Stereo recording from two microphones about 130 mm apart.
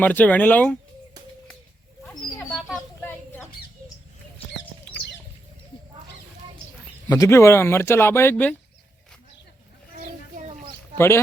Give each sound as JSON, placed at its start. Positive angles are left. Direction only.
{"t": 0.0, "sound": "speech", "side_deg": 15}
{"t": 3.0, "sound": "a sound", "side_deg": 15}
{"t": 7.1, "sound": "speech", "side_deg": 25}
{"t": 10.9, "sound": "speech", "side_deg": 20}